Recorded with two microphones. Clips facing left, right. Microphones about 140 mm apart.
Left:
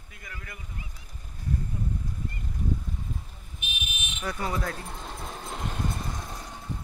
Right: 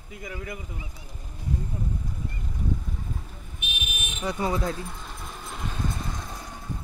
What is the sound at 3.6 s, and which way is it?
Vehicle, 60° right (ahead or behind).